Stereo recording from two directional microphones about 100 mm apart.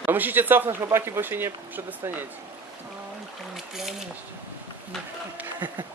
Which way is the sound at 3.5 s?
5° right (ahead or behind).